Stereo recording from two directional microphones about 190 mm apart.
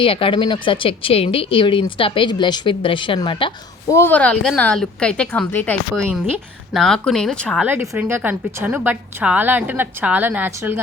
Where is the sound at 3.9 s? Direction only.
10° left (ahead or behind).